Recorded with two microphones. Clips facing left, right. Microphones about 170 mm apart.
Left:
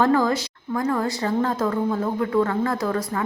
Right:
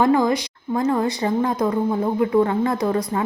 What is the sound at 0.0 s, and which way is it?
A woman's voice, 15° right (ahead or behind).